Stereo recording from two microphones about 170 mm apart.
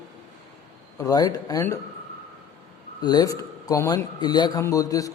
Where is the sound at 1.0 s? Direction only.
20° left (ahead or behind).